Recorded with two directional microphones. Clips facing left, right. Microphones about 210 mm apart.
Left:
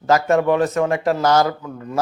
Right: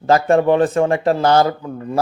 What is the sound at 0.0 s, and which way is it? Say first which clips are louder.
Speech: right 3 dB; 30° right (ahead or behind).